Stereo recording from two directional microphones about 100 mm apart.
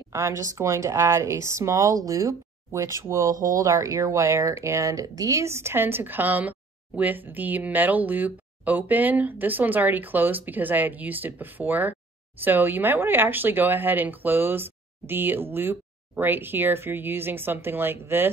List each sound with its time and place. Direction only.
0.1 s speech: 30° right (ahead or behind)